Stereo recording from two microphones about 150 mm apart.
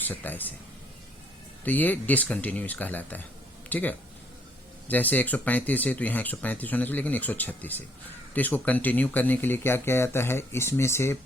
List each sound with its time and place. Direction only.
0.1 s speech: 10° left (ahead or behind)
1.6 s speech: 10° left (ahead or behind)